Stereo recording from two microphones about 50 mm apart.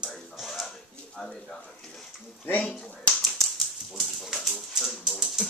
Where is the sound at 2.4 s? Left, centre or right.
Left.